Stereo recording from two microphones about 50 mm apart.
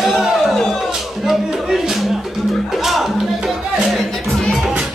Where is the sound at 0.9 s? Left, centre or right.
Centre.